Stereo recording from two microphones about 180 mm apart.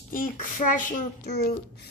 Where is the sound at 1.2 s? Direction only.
60° left (ahead or behind).